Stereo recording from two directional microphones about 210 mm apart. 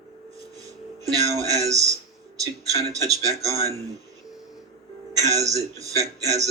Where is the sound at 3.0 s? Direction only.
15° right (ahead or behind).